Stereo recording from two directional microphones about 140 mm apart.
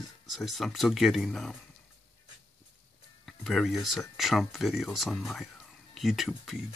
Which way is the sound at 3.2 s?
Centre (ahead or behind).